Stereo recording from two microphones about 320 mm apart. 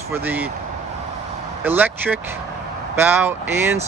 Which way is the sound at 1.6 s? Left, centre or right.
Centre.